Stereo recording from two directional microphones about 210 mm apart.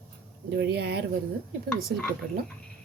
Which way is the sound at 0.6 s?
50° right (ahead or behind).